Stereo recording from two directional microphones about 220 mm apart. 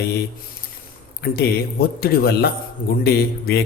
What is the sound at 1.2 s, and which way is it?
A man's voice, 45° left (ahead or behind).